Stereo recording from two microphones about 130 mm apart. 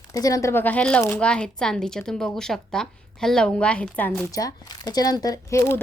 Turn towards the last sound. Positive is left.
turn(degrees=20)  # may be behind; listen again after turning